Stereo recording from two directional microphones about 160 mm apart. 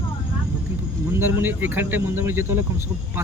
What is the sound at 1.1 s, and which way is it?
Speech, 15° right (ahead or behind).